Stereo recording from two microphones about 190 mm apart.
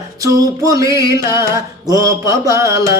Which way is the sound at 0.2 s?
20° right (ahead or behind).